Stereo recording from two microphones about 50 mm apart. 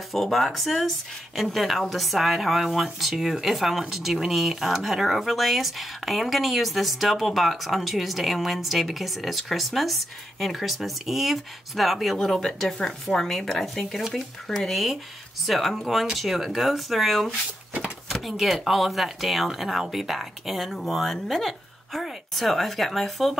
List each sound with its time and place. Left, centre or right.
0.1 s speech: centre
17.3 s speech: right
18.0 s speech: centre